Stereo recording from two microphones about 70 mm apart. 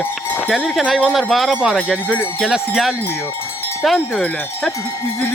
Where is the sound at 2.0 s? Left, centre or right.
Centre.